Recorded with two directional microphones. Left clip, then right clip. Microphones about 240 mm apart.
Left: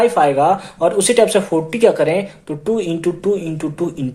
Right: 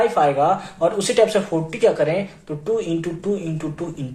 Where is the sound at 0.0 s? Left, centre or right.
Left.